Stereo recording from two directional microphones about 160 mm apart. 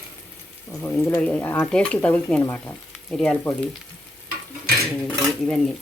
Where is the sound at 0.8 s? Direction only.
10° left (ahead or behind).